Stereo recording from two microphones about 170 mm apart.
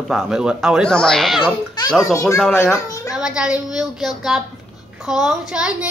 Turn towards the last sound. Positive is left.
turn(degrees=-5)  # may be behind; listen again after turning